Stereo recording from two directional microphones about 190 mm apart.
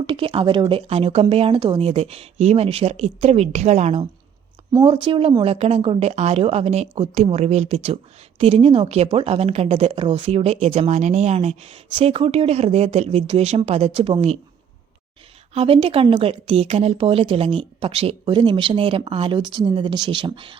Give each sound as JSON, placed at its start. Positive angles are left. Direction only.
{"t": 0.1, "sound": "a woman's voice", "side_deg": -30}
{"t": 4.7, "sound": "a woman's voice", "side_deg": -20}
{"t": 15.5, "sound": "speech", "side_deg": -30}